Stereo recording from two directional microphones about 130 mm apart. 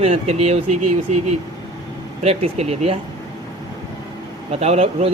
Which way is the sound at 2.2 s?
55° right (ahead or behind).